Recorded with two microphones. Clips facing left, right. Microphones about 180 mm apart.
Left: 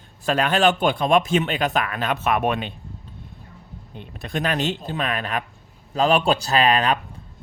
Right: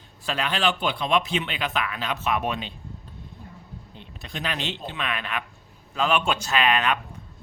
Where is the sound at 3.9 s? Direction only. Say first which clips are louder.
Left 9 dB; 55° left (ahead or behind).